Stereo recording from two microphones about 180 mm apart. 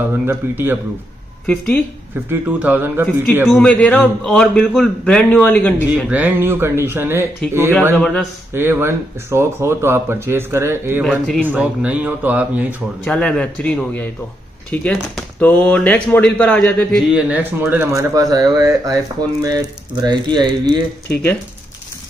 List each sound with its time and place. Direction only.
0.3 s speech: 10° right (ahead or behind)
1.4 s speech: 10° left (ahead or behind)
2.2 s a man's voice: 10° right (ahead or behind); by 6.0 s 5° left (ahead or behind)
6.0 s speech: 10° right (ahead or behind)
7.9 s a man's voice: 5° left (ahead or behind)
8.5 s speech: 10° right (ahead or behind)
11.1 s speech: 5° left (ahead or behind)
11.4 s speech: 10° right (ahead or behind)
13.0 s speech: 5° left (ahead or behind)
17.3 s speech: 10° right (ahead or behind)